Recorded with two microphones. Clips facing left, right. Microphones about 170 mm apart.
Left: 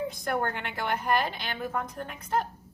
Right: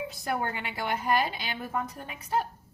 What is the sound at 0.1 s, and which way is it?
A woman's voice, 5° right (ahead or behind).